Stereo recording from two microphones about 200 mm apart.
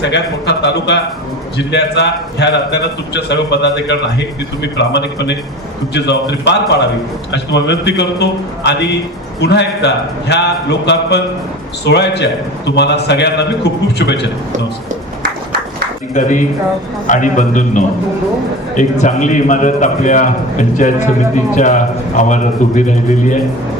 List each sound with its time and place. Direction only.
0.0 s a man's voice: 60° left (ahead or behind)
16.1 s a man's voice: 40° left (ahead or behind)